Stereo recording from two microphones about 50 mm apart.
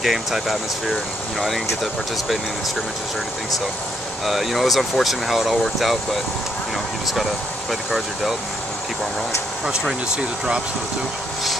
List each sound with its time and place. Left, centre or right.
0.0 s speech: centre
4.3 s speech: centre
7.9 s speech: centre
9.7 s speech: centre